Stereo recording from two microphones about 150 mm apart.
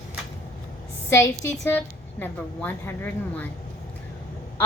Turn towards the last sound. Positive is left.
turn(degrees=10)  # may be behind; listen again after turning